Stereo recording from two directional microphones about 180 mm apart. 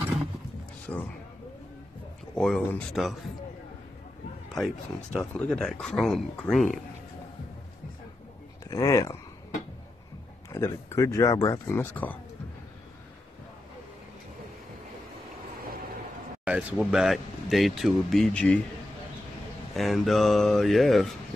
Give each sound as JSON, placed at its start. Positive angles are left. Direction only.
{"t": 0.9, "sound": "speech", "side_deg": 15}
{"t": 2.3, "sound": "speech", "side_deg": 5}
{"t": 5.1, "sound": "speech", "side_deg": 5}
{"t": 8.6, "sound": "speech", "side_deg": 15}
{"t": 10.5, "sound": "speech", "side_deg": 15}
{"t": 16.4, "sound": "speech", "side_deg": -5}
{"t": 19.7, "sound": "speech", "side_deg": 0}